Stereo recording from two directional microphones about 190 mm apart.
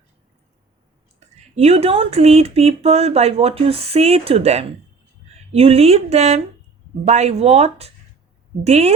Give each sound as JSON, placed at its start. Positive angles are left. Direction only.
{"t": 1.5, "sound": "speech", "side_deg": -30}